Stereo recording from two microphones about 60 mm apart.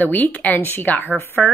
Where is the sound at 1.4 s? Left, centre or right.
Centre.